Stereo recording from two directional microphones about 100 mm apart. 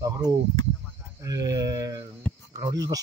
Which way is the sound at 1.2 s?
35° right (ahead or behind).